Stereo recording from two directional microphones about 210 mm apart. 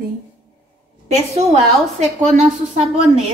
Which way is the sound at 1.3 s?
30° right (ahead or behind).